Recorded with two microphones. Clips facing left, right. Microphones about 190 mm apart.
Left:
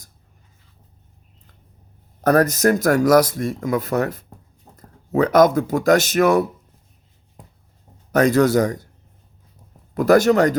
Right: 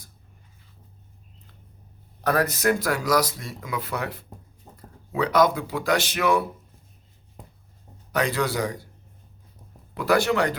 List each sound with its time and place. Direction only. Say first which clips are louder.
2.2 s speech: left 7 dB; 45° left (ahead or behind)
8.1 s speech: left 10 dB; 45° left (ahead or behind)
9.9 s speech: left 8 dB; 45° left (ahead or behind)